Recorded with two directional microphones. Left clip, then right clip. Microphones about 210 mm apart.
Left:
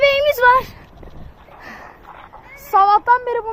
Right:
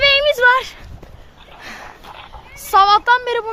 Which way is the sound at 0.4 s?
20° left (ahead or behind).